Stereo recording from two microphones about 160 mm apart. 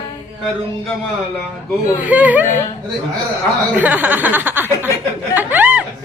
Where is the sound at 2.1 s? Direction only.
10° right (ahead or behind).